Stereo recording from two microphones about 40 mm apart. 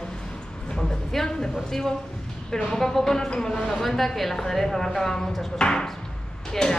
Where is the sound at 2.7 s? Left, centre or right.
Centre.